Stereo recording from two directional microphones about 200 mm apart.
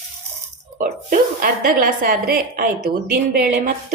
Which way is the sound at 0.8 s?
45° right (ahead or behind).